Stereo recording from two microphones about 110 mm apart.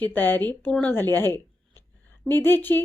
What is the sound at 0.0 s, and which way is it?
A woman's voice, 15° left (ahead or behind).